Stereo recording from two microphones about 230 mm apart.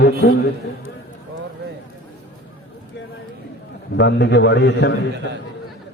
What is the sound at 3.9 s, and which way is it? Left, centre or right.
A man's voice, left.